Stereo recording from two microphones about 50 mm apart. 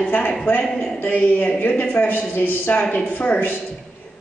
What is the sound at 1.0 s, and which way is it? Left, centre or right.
Speech, left.